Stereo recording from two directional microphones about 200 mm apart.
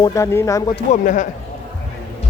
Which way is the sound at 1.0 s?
40° left (ahead or behind).